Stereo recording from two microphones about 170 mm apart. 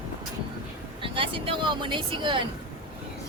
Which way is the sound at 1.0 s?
30° right (ahead or behind).